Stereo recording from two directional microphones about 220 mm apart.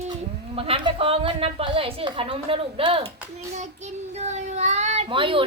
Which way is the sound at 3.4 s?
30° right (ahead or behind).